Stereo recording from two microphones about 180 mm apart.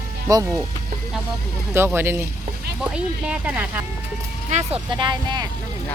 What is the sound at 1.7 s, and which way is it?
Speech, 15° right (ahead or behind).